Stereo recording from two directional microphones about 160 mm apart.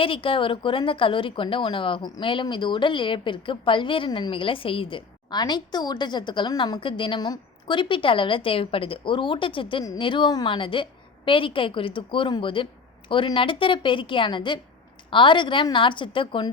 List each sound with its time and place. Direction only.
0.0 s a woman's voice: 35° left (ahead or behind)